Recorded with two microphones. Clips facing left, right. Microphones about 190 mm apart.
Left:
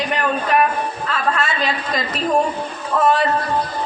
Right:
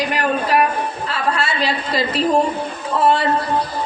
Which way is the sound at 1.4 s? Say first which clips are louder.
Right 1 dB; 30° right (ahead or behind).